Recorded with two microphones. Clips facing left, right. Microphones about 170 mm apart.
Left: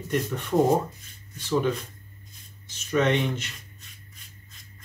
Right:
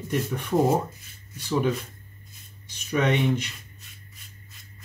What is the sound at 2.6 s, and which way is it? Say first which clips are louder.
Speech: left 1 dB; 15° right (ahead or behind).